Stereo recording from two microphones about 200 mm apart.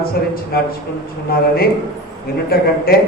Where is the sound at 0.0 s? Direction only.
50° left (ahead or behind).